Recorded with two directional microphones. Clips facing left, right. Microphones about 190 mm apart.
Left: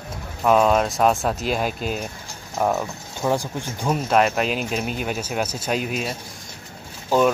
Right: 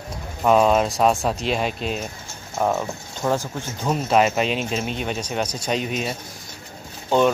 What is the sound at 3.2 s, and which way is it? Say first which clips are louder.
Speech: left 1 dB; 15° left (ahead or behind).